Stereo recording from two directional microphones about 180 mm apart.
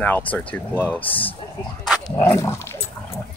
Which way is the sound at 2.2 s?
15° left (ahead or behind).